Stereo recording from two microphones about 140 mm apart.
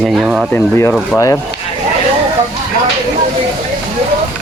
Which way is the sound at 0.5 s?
15° left (ahead or behind).